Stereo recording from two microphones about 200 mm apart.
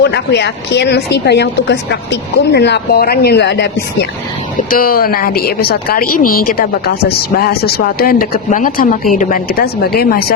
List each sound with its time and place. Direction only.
0.0 s a woman's voice: 60° left (ahead or behind)
4.7 s a woman's voice: 45° left (ahead or behind)